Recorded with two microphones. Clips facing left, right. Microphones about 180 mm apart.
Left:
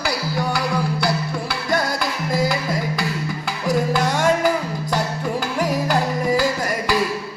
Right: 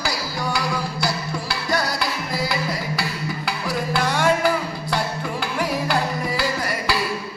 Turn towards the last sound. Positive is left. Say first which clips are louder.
# left 5 dB
turn(degrees=45)  # may be behind; listen again after turning